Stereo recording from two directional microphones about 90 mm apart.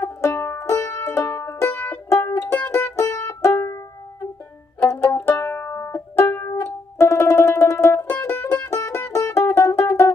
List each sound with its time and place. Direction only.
0.0 s music: 30° left (ahead or behind)
4.8 s music: 25° left (ahead or behind)